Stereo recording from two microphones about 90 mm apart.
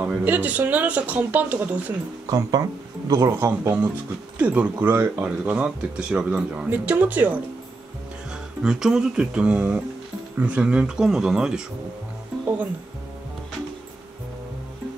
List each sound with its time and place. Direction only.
0.0 s speech: 20° right (ahead or behind)
3.1 s speech: 35° right (ahead or behind)
4.4 s speech: 15° right (ahead or behind)
8.3 s speech: 5° right (ahead or behind)